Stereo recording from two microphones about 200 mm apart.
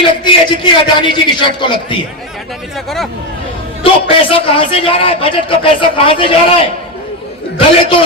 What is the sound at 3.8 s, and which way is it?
A man's voice, 25° left (ahead or behind).